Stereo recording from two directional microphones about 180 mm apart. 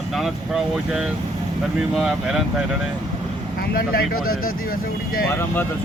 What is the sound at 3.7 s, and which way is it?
Speech, 55° left (ahead or behind).